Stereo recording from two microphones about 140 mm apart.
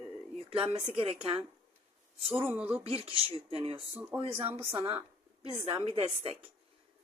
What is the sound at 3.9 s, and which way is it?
Speech, 10° right (ahead or behind).